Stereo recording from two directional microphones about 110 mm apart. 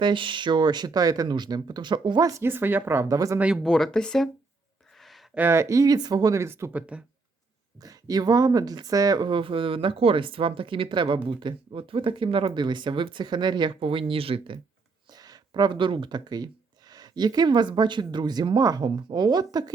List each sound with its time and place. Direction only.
0.0 s speech: 45° right (ahead or behind)
2.3 s speech: 20° right (ahead or behind)
3.3 s speech: 10° right (ahead or behind)
3.6 s speech: 5° left (ahead or behind)
4.9 s a sound: centre (ahead or behind)
5.3 s speech: 20° right (ahead or behind)
6.7 s speech: 10° right (ahead or behind)
7.8 s speech: 35° right (ahead or behind); by 14.6 s 55° right (ahead or behind)
15.1 s speech: 35° right (ahead or behind)